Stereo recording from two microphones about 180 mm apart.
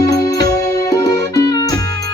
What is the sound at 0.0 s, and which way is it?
Music, 20° left (ahead or behind).